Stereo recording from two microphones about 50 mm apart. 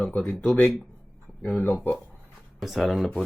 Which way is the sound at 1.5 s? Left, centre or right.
Left.